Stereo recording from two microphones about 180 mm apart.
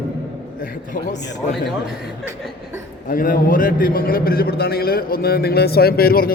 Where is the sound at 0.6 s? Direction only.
50° left (ahead or behind).